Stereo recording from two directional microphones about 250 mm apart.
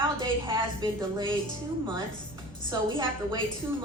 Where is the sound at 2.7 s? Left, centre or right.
Centre.